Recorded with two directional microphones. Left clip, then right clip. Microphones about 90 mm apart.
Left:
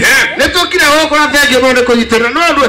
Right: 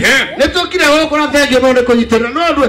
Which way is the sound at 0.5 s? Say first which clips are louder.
Left 2 dB; 30° right (ahead or behind).